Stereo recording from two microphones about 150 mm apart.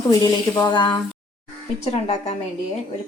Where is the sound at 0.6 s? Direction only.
30° left (ahead or behind).